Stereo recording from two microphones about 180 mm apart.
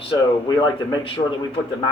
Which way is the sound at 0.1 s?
25° left (ahead or behind).